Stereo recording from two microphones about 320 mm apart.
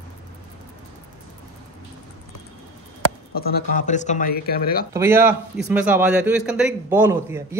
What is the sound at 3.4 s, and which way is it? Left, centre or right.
Speech, left.